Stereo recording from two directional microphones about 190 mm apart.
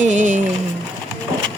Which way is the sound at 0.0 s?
40° right (ahead or behind).